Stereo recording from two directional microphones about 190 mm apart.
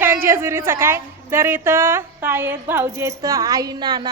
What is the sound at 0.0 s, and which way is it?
A woman's voice, 10° right (ahead or behind).